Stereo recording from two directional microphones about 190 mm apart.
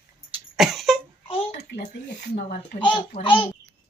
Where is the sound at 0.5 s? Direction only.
Centre (ahead or behind).